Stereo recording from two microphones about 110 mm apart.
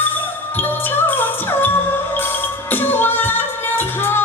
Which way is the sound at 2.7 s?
20° left (ahead or behind).